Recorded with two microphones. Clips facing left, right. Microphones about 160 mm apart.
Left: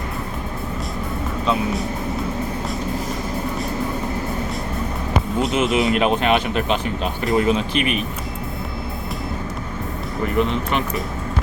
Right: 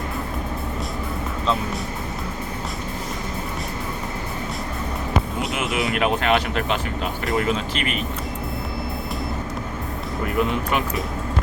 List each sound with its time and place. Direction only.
5.4 s speech: 25° left (ahead or behind)
10.2 s speech: 5° right (ahead or behind)